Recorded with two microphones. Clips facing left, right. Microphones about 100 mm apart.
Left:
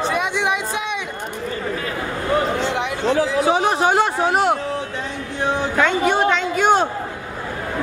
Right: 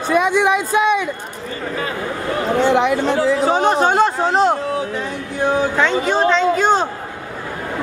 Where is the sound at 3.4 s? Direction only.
15° left (ahead or behind).